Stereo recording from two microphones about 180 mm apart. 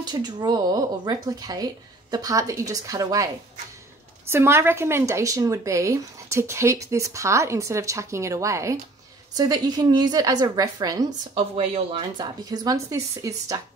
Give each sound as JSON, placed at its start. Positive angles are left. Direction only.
{"t": 0.0, "sound": "speech", "side_deg": -25}
{"t": 4.3, "sound": "speech", "side_deg": -15}
{"t": 11.1, "sound": "speech", "side_deg": -30}